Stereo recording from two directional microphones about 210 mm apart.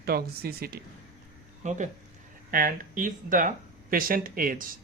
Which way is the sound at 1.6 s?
35° right (ahead or behind).